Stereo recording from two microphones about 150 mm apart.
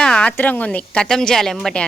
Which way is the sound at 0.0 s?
5° left (ahead or behind).